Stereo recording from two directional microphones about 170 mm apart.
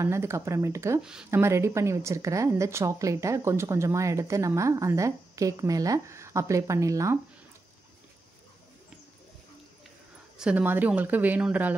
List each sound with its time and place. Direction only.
0.0 s speech: 15° right (ahead or behind)
10.3 s speech: 5° right (ahead or behind)